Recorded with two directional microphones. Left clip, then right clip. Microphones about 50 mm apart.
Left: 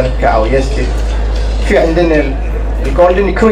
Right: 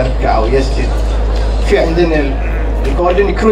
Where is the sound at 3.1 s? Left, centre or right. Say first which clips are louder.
Left 1 dB; right.